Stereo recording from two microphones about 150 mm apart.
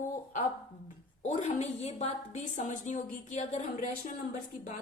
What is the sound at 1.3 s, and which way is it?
Speech, 50° left (ahead or behind).